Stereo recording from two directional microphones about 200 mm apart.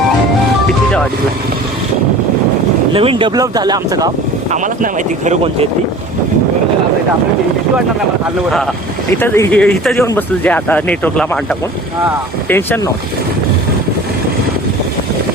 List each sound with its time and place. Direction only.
2.9 s speech: 25° right (ahead or behind)
4.5 s speech: 40° right (ahead or behind)
9.1 s speech: 10° left (ahead or behind)
12.5 s speech: 10° left (ahead or behind)